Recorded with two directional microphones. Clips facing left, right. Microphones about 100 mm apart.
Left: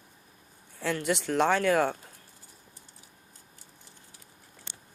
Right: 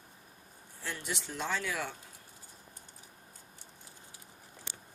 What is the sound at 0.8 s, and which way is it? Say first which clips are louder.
Speech: left 11 dB; 65° left (ahead or behind).